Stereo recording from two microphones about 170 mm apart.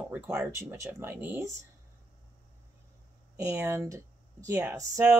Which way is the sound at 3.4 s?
15° right (ahead or behind).